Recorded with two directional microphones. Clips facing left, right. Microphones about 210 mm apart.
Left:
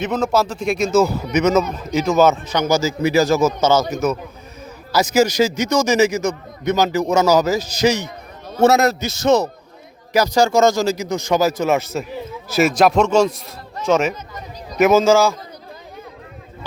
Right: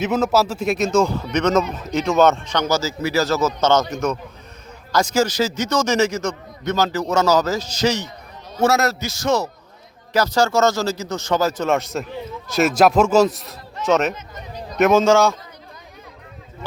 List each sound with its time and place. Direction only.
0.0 s a man's voice: 5° right (ahead or behind)